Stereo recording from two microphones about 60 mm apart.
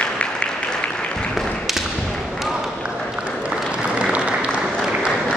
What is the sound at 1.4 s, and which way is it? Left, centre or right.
Tap, centre.